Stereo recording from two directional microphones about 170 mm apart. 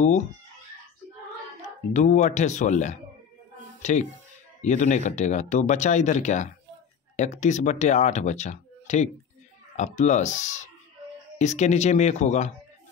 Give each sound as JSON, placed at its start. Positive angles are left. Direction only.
{"t": 2.0, "sound": "speech", "side_deg": 45}